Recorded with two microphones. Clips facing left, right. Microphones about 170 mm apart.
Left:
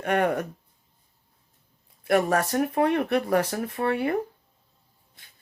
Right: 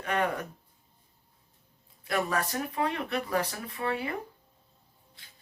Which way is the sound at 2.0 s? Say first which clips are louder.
Left 8 dB; 60° left (ahead or behind).